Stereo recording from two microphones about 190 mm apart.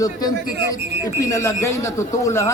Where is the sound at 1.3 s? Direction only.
15° left (ahead or behind).